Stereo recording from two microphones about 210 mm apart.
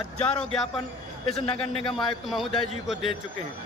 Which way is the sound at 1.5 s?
25° left (ahead or behind).